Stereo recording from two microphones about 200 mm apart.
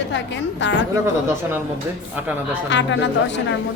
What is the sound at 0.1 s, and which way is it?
Speech, 65° left (ahead or behind).